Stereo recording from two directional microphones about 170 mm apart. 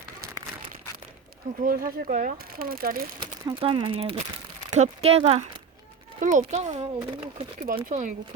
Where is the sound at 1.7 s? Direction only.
55° right (ahead or behind).